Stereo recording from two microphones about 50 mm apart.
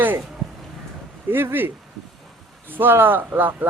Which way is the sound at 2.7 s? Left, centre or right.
Right.